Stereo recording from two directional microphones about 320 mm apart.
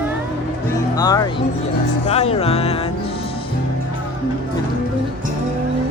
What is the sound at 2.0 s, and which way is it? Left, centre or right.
Speech, centre.